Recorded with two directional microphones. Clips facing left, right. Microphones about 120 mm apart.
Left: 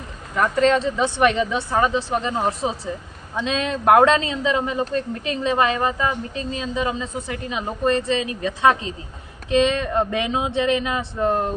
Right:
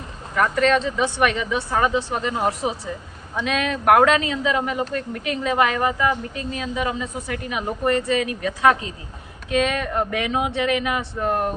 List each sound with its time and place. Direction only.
0.3 s a woman's voice: 30° left (ahead or behind)